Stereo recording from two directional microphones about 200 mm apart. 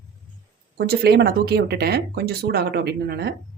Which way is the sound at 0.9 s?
55° right (ahead or behind).